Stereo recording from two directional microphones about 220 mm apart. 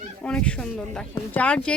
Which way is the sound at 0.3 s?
5° left (ahead or behind).